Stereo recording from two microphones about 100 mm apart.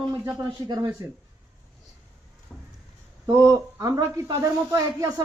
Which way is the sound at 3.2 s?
35° right (ahead or behind).